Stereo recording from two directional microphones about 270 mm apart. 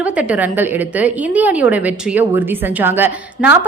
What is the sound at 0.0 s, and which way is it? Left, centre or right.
A woman's voice, centre.